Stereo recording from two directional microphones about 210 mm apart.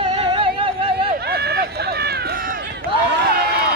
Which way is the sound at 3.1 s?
50° right (ahead or behind).